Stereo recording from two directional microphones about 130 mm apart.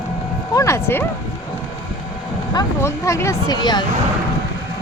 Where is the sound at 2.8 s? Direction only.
20° left (ahead or behind).